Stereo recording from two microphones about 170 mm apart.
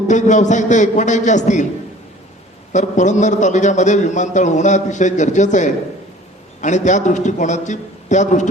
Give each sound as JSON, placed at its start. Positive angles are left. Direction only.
{"t": 0.1, "sound": "a man's voice", "side_deg": 45}
{"t": 2.7, "sound": "a man's voice", "side_deg": 45}